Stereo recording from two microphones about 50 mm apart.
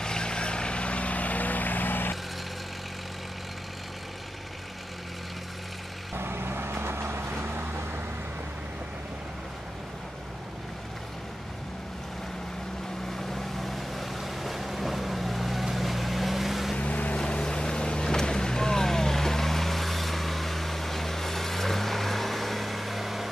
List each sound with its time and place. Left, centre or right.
0.0 s vehicle: centre; by 2.1 s left
6.1 s vehicle: right
13.1 s boat: centre
16.7 s boat: left
17.2 s boat: centre